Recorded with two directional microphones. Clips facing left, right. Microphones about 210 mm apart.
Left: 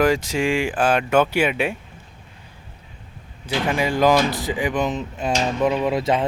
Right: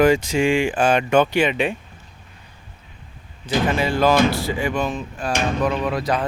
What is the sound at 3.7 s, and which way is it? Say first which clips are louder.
Speech: left 1 dB; 15° left (ahead or behind).